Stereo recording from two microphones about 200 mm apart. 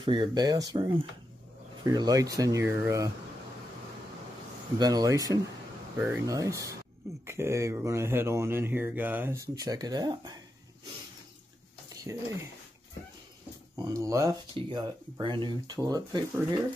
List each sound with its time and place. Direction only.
0.0 s speech: 25° right (ahead or behind)
4.7 s speech: 20° right (ahead or behind)
12.0 s speech: 15° right (ahead or behind)
13.7 s speech: 15° right (ahead or behind)